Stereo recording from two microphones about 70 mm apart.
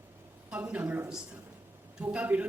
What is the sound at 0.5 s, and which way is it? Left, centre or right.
Speech, centre.